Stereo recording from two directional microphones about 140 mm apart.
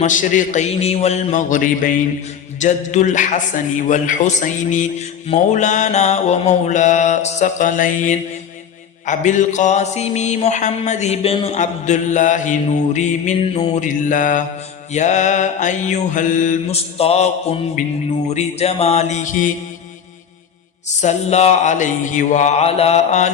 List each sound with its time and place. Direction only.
0.0 s a man's voice: 65° left (ahead or behind)
21.0 s a man's voice: 50° left (ahead or behind)